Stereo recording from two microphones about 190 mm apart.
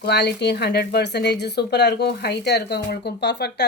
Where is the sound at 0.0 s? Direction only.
60° left (ahead or behind).